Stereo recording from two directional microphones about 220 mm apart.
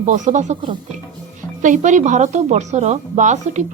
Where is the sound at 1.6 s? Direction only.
35° right (ahead or behind).